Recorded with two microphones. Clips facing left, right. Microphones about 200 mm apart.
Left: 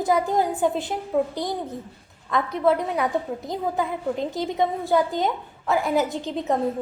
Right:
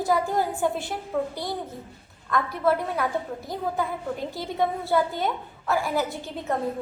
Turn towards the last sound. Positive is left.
turn(degrees=20)  # may be behind; listen again after turning